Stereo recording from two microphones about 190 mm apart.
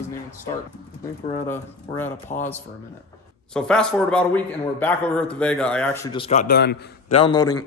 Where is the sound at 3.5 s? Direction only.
5° left (ahead or behind).